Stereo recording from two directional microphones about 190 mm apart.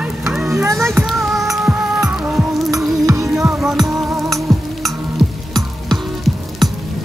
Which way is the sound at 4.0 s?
15° right (ahead or behind).